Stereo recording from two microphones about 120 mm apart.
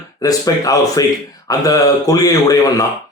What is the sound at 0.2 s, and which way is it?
A man's voice, 30° left (ahead or behind).